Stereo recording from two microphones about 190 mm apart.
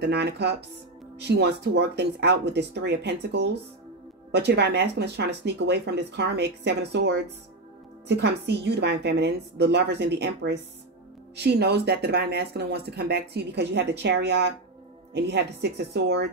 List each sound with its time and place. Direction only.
0.0 s speech: 60° right (ahead or behind)